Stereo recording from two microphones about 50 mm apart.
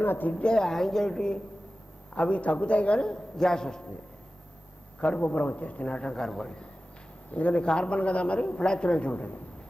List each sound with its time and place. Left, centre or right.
0.0 s a woman's voice: left
0.4 s a man's voice: centre
5.0 s a man's voice: left
7.2 s a man's voice: left